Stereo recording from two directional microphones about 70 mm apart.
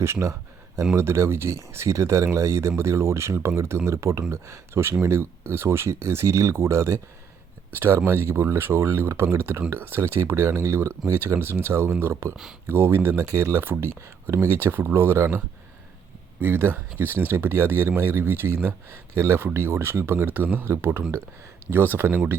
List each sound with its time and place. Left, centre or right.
0.0 s speech: right
13.3 s speech: right
14.7 s speech: right
16.4 s speech: right